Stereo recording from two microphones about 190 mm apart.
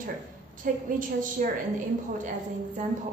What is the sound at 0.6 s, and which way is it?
Speech, 45° right (ahead or behind).